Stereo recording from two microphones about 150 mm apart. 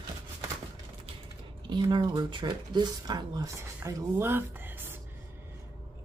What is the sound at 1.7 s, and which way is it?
Speech, 30° right (ahead or behind).